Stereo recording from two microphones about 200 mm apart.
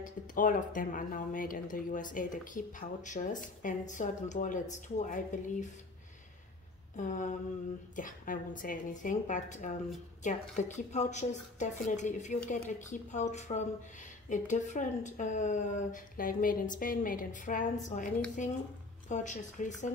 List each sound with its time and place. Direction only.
0.0 s a woman's voice: 40° left (ahead or behind)
7.0 s a woman's voice: 40° left (ahead or behind)
19.0 s a woman's voice: 35° left (ahead or behind)